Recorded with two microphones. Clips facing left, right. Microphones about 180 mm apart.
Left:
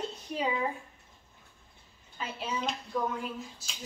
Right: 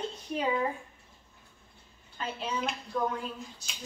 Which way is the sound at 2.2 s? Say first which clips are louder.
Right 1 dB; 5° left (ahead or behind).